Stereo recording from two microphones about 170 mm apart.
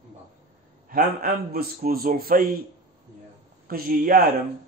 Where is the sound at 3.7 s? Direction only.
60° right (ahead or behind).